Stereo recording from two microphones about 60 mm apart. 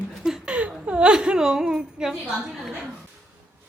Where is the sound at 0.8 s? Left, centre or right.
Centre.